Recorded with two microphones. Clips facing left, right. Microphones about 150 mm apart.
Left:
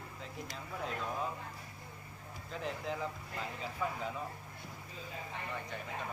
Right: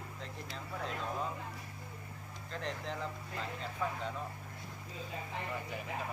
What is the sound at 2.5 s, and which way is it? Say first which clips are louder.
Speech: left 1 dB; 5° left (ahead or behind).